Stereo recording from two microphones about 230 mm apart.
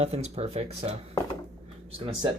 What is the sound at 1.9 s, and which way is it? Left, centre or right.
Speech, right.